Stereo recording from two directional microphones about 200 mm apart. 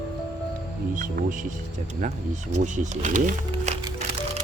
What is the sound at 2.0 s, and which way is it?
Speech, 35° right (ahead or behind).